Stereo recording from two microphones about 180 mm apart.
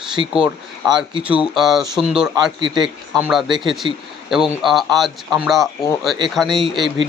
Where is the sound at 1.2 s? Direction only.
5° right (ahead or behind).